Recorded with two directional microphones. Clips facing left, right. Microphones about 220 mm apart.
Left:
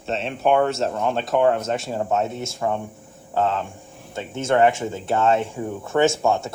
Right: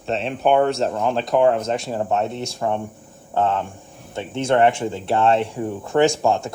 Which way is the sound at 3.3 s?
20° right (ahead or behind).